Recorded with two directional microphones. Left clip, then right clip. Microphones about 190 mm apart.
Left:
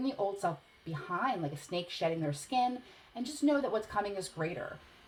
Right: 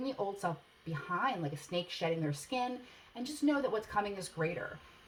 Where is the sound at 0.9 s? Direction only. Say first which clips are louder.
Left 1 dB; 25° left (ahead or behind).